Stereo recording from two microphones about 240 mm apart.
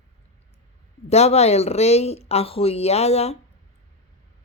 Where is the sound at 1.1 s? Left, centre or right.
Left.